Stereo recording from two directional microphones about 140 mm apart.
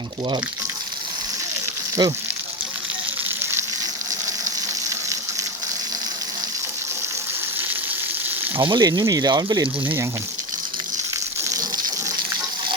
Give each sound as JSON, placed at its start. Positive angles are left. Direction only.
{"t": 2.0, "sound": "speech", "side_deg": -30}
{"t": 8.6, "sound": "speech", "side_deg": -30}